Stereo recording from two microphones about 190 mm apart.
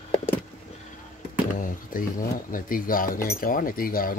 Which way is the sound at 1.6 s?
45° left (ahead or behind).